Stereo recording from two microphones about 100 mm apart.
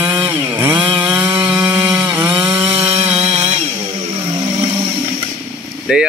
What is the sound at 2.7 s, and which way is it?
Chainsaw, 80° right.